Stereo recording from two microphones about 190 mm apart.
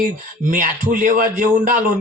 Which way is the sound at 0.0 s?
45° right (ahead or behind).